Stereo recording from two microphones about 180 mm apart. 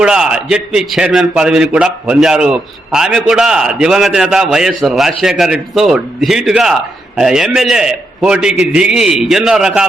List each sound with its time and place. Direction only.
0.0 s a man's voice: 5° right (ahead or behind)